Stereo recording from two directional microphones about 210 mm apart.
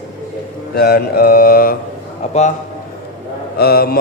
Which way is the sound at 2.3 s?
35° left (ahead or behind).